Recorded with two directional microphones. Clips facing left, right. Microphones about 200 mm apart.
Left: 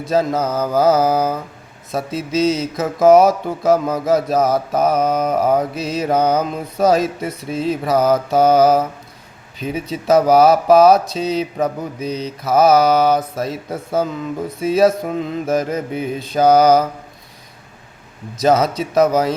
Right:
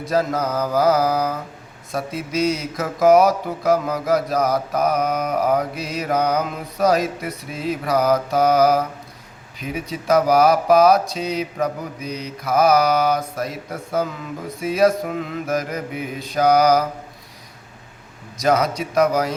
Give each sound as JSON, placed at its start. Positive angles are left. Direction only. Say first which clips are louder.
{"t": 0.1, "sound": "mantra", "louder": "left 3 dB", "side_deg": 25}
{"t": 18.3, "sound": "mantra", "louder": "left 4 dB", "side_deg": 25}